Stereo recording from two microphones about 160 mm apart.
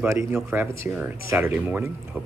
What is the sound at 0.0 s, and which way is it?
Speech, 15° right (ahead or behind).